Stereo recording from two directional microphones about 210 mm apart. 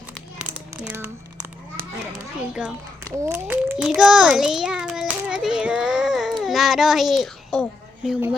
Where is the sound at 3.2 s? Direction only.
10° right (ahead or behind).